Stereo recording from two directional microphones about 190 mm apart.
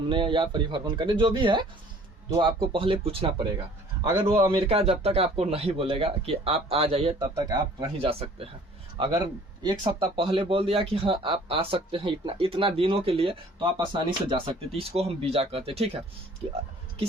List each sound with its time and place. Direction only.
0.1 s speech: 25° right (ahead or behind)
4.0 s a man's voice: 10° right (ahead or behind)
4.5 s a man's voice: 30° right (ahead or behind)
7.3 s speech: 20° right (ahead or behind)
7.9 s a man's voice: 30° right (ahead or behind)